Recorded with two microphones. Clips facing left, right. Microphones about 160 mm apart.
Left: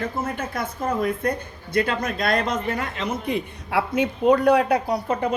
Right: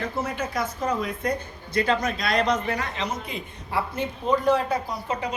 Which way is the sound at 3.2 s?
65° left (ahead or behind).